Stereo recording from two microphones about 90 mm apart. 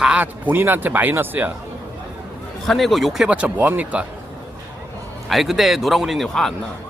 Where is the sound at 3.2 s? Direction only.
15° right (ahead or behind).